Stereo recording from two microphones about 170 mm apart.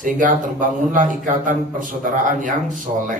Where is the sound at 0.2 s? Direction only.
50° right (ahead or behind).